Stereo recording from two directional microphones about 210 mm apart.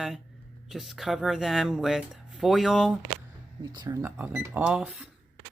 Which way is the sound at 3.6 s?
20° right (ahead or behind).